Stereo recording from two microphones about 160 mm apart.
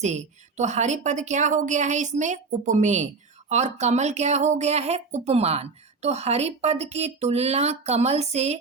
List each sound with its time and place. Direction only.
0.0 s speech: 45° right (ahead or behind)